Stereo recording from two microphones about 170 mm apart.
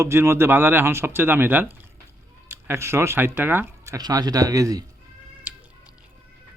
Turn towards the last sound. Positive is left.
turn(degrees=-10)  # may be behind; listen again after turning